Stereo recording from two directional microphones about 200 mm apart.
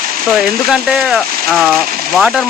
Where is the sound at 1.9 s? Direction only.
45° right (ahead or behind).